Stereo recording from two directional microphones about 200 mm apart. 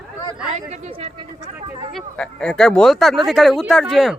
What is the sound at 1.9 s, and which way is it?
Speech, centre (ahead or behind).